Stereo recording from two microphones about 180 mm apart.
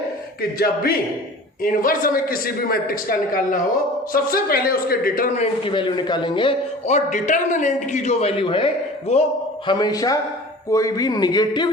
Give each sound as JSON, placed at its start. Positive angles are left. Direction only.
{"t": 1.6, "sound": "a man's voice", "side_deg": 50}
{"t": 9.6, "sound": "a man's voice", "side_deg": 25}